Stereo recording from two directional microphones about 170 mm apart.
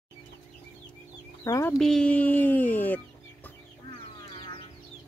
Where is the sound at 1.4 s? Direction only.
15° left (ahead or behind).